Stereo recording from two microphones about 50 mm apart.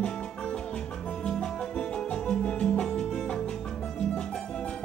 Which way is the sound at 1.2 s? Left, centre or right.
Centre.